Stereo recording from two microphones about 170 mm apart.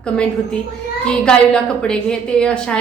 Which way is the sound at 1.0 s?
5° left (ahead or behind).